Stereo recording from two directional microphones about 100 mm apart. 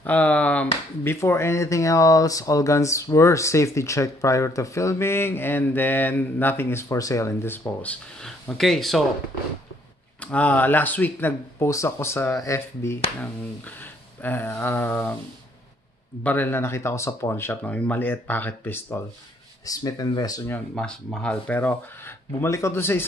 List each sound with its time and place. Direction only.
0.0 s speech: 15° left (ahead or behind)
1.0 s speech: 30° left (ahead or behind); by 9.0 s 5° left (ahead or behind)
10.2 s speech: 15° left (ahead or behind)
14.2 s speech: 20° left (ahead or behind)
16.3 s speech: 20° left (ahead or behind)
19.6 s speech: 35° left (ahead or behind)
20.7 s speech: 5° left (ahead or behind)
21.5 s speech: 20° left (ahead or behind)